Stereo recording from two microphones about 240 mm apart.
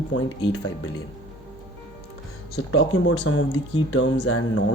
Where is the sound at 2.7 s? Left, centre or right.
Left.